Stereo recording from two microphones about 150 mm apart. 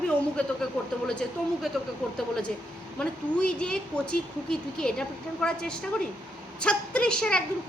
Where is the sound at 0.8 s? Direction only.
5° left (ahead or behind).